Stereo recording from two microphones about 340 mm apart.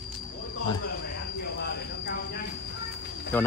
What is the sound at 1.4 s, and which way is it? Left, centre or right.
Train, left.